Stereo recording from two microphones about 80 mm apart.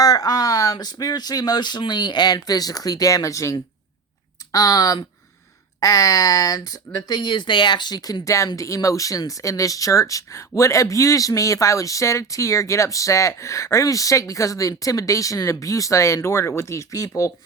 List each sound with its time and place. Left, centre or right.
0.0 s speech: left